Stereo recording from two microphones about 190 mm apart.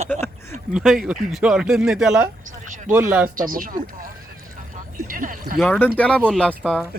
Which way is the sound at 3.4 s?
45° right (ahead or behind).